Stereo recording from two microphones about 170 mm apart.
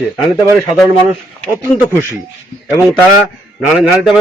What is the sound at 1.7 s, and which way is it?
Speech, 5° left (ahead or behind).